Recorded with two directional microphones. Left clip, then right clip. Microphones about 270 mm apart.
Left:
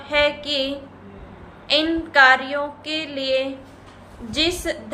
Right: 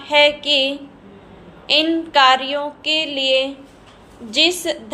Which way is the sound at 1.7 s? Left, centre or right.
Centre.